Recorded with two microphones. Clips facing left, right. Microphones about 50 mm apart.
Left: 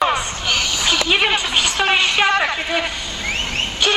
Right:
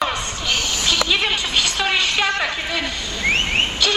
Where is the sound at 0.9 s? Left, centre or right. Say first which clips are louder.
Left 4 dB; left.